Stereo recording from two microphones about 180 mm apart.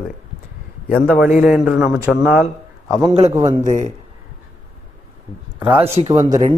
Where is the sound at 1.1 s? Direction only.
5° right (ahead or behind).